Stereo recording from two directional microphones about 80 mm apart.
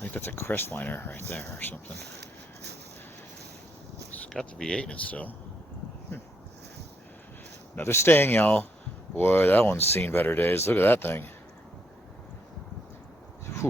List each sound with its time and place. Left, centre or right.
0.0 s speech: left
4.3 s speech: centre
7.8 s speech: left